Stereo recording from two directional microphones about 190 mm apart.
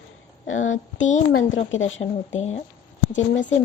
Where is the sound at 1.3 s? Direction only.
85° left.